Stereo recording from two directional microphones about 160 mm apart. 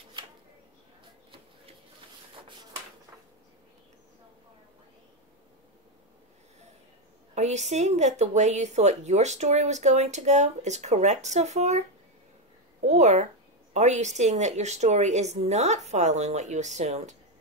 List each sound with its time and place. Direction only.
7.3 s speech: 45° right (ahead or behind)
12.8 s speech: 45° right (ahead or behind)